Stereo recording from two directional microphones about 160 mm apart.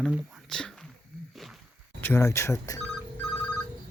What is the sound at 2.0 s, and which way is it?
Speech, 15° left (ahead or behind).